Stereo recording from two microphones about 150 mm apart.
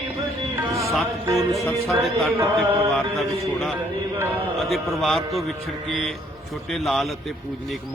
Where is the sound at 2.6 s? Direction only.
Centre (ahead or behind).